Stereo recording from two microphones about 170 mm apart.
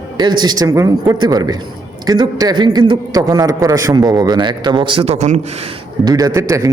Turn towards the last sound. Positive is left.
turn(degrees=-15)  # may be behind; listen again after turning